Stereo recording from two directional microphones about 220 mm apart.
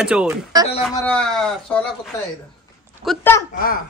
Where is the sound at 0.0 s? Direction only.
5° right (ahead or behind).